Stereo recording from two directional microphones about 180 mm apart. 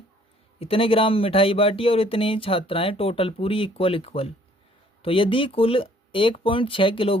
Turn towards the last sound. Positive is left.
turn(degrees=30)  # may be behind; listen again after turning